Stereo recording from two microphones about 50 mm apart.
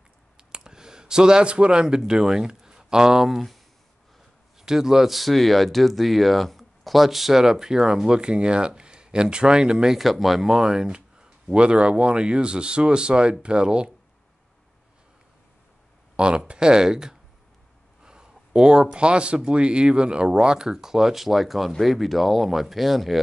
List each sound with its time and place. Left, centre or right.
0.4 s speech: centre
9.9 s speech: centre
16.2 s speech: centre